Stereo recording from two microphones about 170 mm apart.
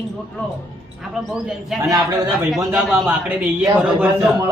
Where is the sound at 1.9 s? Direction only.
20° right (ahead or behind).